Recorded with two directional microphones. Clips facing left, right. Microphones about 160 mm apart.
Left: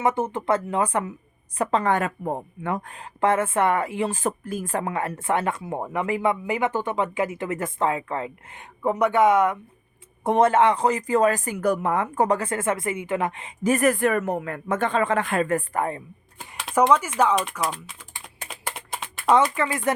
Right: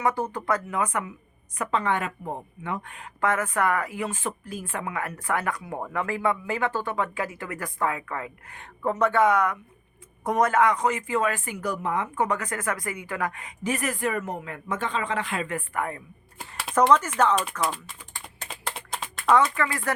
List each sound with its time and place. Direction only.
0.0 s speech: 20° left (ahead or behind)
1.8 s speech: 45° left (ahead or behind); by 4.2 s 25° left (ahead or behind)
4.2 s speech: 45° left (ahead or behind); by 8.6 s 25° left (ahead or behind)
8.8 s speech: 15° left (ahead or behind); by 11.5 s 40° left (ahead or behind)
11.5 s speech: 55° left (ahead or behind)
12.1 s speech: 35° left (ahead or behind)
13.7 s speech: 50° left (ahead or behind); by 16.0 s 30° left (ahead or behind)
16.7 s speech: 10° left (ahead or behind)
18.4 s typing: 5° left (ahead or behind)
19.3 s speech: 20° left (ahead or behind)